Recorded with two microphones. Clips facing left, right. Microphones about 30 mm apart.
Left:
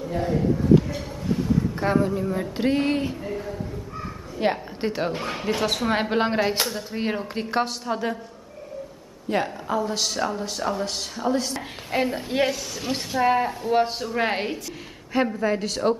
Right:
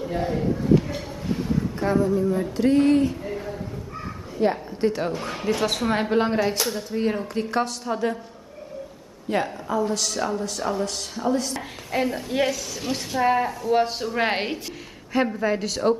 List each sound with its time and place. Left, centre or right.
0.0 s a man's voice: centre
1.9 s speech: left
3.3 s a sound: centre
4.4 s a woman's voice: left
4.7 s speech: centre
5.9 s speech: centre
9.3 s speech: centre
14.1 s a woman's voice: centre
15.1 s speech: centre